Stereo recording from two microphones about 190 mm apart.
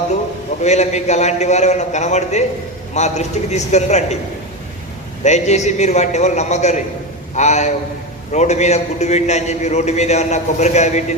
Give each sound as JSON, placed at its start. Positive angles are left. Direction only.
{"t": 0.6, "sound": "a man's voice", "side_deg": 35}
{"t": 5.2, "sound": "a man's voice", "side_deg": 35}